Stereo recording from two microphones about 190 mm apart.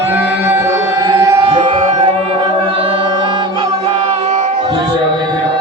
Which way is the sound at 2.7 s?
30° right (ahead or behind).